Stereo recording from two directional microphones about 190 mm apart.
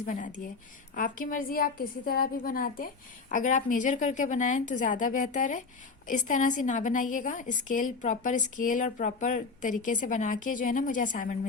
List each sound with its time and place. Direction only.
0.0 s a woman's voice: 40° left (ahead or behind)